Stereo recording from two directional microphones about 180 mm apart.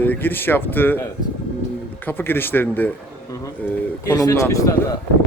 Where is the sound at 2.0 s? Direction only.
10° left (ahead or behind).